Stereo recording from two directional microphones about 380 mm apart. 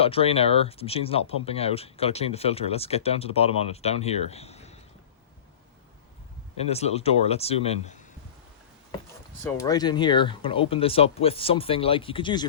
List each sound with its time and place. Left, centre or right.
0.0 s speech: centre
6.6 s speech: centre
9.4 s speech: centre